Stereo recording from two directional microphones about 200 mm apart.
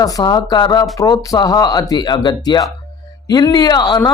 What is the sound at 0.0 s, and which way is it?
Speech, 20° left (ahead or behind).